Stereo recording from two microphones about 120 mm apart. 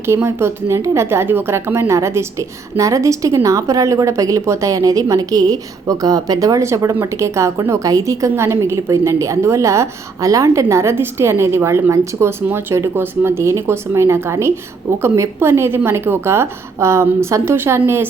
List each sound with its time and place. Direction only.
0.1 s a woman's voice: 20° right (ahead or behind)